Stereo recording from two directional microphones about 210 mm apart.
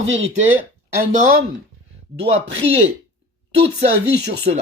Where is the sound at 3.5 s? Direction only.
30° right (ahead or behind).